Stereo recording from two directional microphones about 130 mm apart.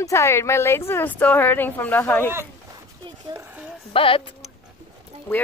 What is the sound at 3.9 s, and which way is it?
Speech, 45° left (ahead or behind).